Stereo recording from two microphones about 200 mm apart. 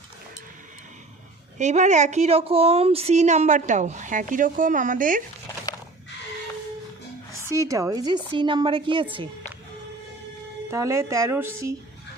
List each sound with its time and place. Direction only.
1.5 s a woman's voice: 35° right (ahead or behind)
7.4 s a woman's voice: 15° right (ahead or behind)
10.7 s speech: 15° right (ahead or behind)